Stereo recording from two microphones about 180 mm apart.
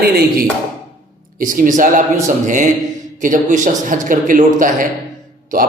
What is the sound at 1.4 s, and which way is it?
A man's voice, 50° right (ahead or behind).